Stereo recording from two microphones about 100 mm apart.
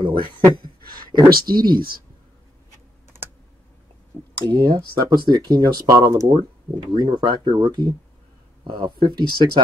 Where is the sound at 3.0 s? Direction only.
20° right (ahead or behind).